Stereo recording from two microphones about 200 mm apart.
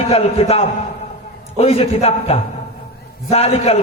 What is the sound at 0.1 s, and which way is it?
A man's voice, 30° left (ahead or behind).